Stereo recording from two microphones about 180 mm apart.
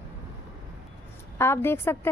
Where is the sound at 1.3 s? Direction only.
15° left (ahead or behind).